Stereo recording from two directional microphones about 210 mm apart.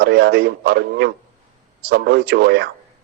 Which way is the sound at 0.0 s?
50° right (ahead or behind).